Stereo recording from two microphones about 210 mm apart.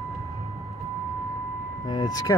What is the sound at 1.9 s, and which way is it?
Speech, 20° left (ahead or behind).